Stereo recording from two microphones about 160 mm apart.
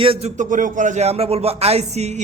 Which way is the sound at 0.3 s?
55° right (ahead or behind).